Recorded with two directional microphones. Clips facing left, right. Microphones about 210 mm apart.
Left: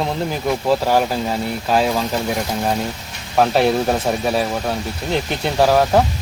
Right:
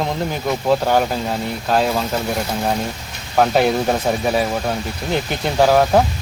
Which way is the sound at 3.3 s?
Centre (ahead or behind).